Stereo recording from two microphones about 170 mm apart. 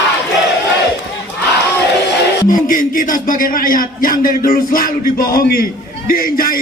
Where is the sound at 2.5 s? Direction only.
55° left (ahead or behind).